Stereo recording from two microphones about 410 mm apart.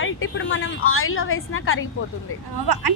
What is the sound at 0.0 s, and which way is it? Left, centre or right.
Speech, left.